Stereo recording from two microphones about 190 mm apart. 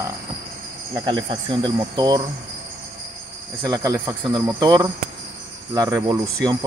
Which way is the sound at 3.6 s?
20° right (ahead or behind).